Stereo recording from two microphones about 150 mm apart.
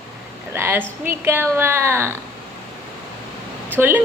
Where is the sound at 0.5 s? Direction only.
15° right (ahead or behind).